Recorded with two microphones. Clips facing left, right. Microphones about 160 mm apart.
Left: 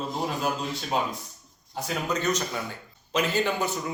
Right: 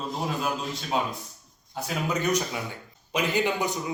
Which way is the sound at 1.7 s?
5° right (ahead or behind).